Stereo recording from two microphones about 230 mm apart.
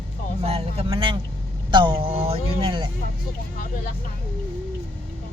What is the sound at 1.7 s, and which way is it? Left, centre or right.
Vehicle, centre.